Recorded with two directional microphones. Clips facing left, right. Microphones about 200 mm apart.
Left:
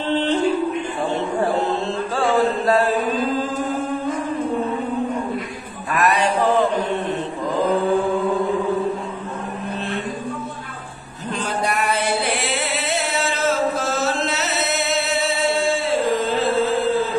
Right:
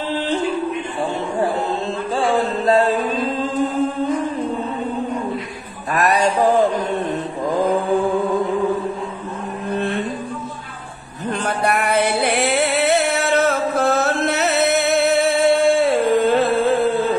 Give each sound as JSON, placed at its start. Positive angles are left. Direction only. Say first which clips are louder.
{"t": 2.2, "sound": "chant", "louder": "even", "side_deg": -20}
{"t": 5.9, "sound": "a sound", "louder": "right 2 dB", "side_deg": -40}
{"t": 9.8, "sound": "music", "louder": "right 7 dB", "side_deg": -55}
{"t": 11.4, "sound": "music", "louder": "right 2 dB", "side_deg": -55}